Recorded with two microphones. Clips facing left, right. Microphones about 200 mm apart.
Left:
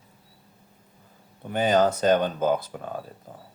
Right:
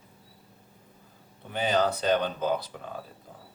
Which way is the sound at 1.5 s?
45° left (ahead or behind).